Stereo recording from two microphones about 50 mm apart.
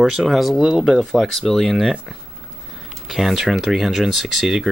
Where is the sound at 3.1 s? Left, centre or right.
Centre.